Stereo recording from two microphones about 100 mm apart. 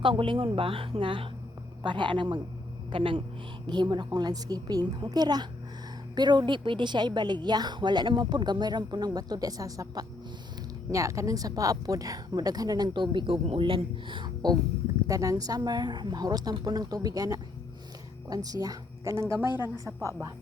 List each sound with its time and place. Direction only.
0.0 s a woman's voice: 55° right (ahead or behind)
3.7 s a woman's voice: 50° right (ahead or behind)
15.0 s a woman's voice: 35° right (ahead or behind)
19.4 s a woman's voice: 45° left (ahead or behind)
19.8 s a woman's voice: 30° right (ahead or behind)